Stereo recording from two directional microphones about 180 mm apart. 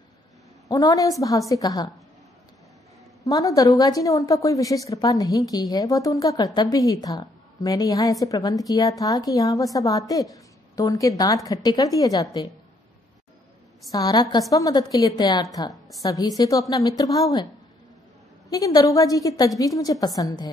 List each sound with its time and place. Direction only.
0.7 s a woman's voice: 20° left (ahead or behind)
3.3 s a woman's voice: 20° left (ahead or behind)
13.8 s a woman's voice: 20° left (ahead or behind)
18.5 s a woman's voice: 20° left (ahead or behind)